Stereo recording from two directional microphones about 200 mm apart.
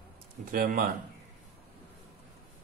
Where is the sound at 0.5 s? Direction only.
45° right (ahead or behind).